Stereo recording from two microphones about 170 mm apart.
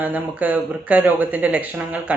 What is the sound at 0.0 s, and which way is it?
Speech, 10° right (ahead or behind).